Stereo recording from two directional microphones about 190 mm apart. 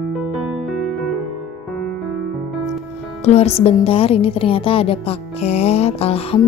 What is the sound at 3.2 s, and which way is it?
A woman's voice, 35° left (ahead or behind).